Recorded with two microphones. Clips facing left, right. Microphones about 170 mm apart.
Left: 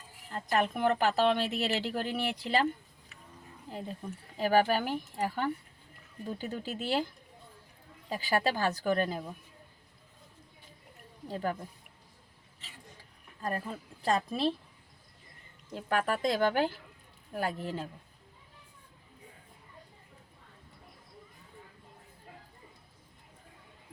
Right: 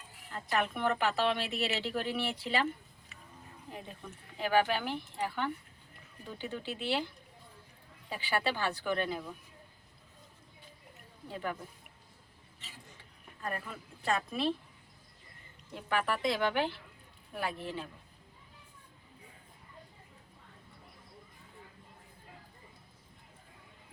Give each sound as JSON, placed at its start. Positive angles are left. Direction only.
{"t": 0.3, "sound": "a woman's voice", "side_deg": 40}
{"t": 3.7, "sound": "a woman's voice", "side_deg": 35}
{"t": 8.1, "sound": "a woman's voice", "side_deg": 40}
{"t": 11.3, "sound": "a woman's voice", "side_deg": 35}
{"t": 13.4, "sound": "a woman's voice", "side_deg": 35}
{"t": 15.7, "sound": "a woman's voice", "side_deg": 40}